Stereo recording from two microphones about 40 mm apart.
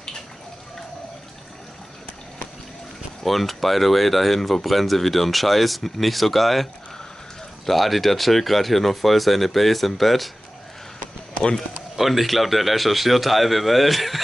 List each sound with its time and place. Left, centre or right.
3.3 s speech: centre
11.0 s a sound: left
12.0 s speech: centre